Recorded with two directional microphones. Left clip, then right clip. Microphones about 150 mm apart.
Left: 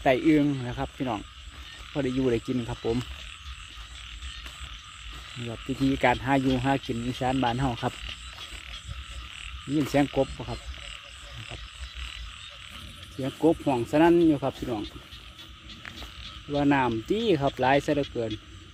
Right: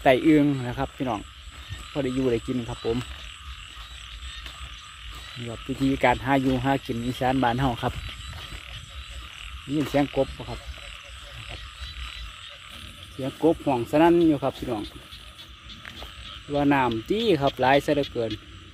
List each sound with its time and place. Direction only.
0.0 s speech: 15° right (ahead or behind)
1.9 s speech: 5° left (ahead or behind)
2.2 s speech: 20° left (ahead or behind)
5.8 s speech: 5° left (ahead or behind)
9.9 s speech: 20° left (ahead or behind)
10.3 s speech: 30° left (ahead or behind)
13.2 s speech: 15° left (ahead or behind)
16.5 s speech: 15° left (ahead or behind)